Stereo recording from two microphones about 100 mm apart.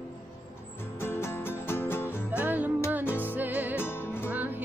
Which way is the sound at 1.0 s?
25° left (ahead or behind).